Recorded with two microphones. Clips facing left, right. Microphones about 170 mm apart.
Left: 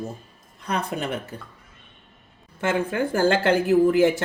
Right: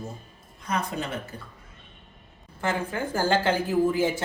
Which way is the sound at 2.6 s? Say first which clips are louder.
Left 5 dB; 80° left.